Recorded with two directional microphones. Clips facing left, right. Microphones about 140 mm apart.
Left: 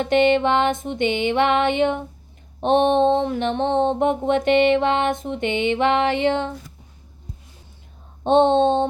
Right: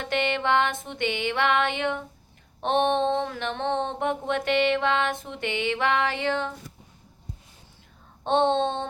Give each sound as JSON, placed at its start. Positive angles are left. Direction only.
{"t": 0.0, "sound": "mantra", "side_deg": 20}
{"t": 8.2, "sound": "mantra", "side_deg": 20}